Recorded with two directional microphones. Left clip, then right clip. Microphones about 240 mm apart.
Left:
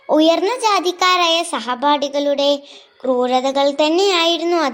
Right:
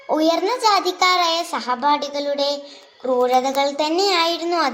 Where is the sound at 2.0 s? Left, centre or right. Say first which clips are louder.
Left 5 dB; left.